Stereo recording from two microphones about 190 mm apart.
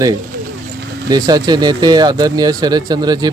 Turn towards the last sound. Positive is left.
turn(degrees=-20)  # may be behind; listen again after turning